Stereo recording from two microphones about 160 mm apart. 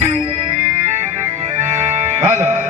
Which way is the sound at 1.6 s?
45° right (ahead or behind).